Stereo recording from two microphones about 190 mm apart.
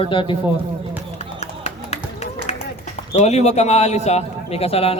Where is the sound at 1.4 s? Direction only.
35° left (ahead or behind).